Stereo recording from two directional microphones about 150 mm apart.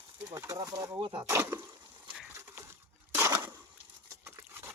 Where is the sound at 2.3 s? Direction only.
20° right (ahead or behind).